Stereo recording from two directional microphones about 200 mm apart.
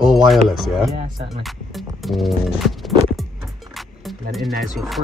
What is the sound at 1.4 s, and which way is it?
Music, centre (ahead or behind).